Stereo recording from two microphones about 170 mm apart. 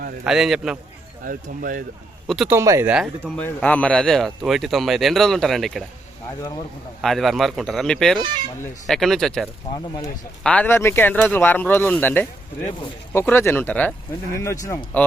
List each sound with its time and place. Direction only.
0.3 s speech: 5° right (ahead or behind)
1.2 s speech: 55° right (ahead or behind)
2.2 s speech: centre (ahead or behind)
2.5 s speech: 15° right (ahead or behind)
2.9 s speech: centre (ahead or behind)
7.0 s speech: centre (ahead or behind)
9.7 s speech: 20° left (ahead or behind)
10.4 s speech: 10° left (ahead or behind)